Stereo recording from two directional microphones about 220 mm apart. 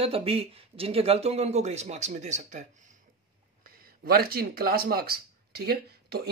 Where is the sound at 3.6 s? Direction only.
45° right (ahead or behind).